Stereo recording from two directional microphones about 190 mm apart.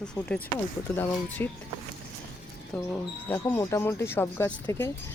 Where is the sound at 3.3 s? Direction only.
15° left (ahead or behind).